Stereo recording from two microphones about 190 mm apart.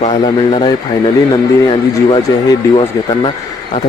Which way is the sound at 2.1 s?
25° left (ahead or behind).